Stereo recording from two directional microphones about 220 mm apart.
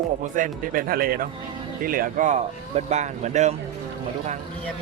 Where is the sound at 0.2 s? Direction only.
35° right (ahead or behind).